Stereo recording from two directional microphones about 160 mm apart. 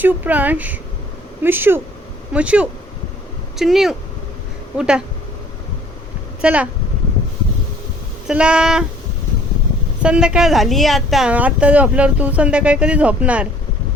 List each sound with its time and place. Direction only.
0.0 s a woman's voice: 10° right (ahead or behind)
6.4 s speech: 10° right (ahead or behind)
8.3 s speech: 5° right (ahead or behind)
10.0 s a woman's voice: 5° right (ahead or behind)